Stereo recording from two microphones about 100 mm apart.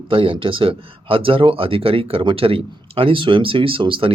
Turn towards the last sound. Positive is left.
turn(degrees=-60)  # may be behind; listen again after turning